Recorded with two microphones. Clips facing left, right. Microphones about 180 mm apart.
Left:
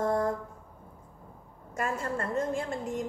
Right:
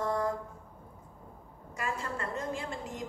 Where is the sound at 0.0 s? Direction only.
50° left (ahead or behind).